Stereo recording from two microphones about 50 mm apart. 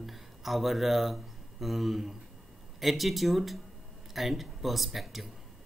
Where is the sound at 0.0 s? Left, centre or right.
Centre.